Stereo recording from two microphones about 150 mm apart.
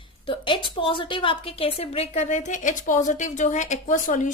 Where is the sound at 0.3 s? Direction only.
35° left (ahead or behind).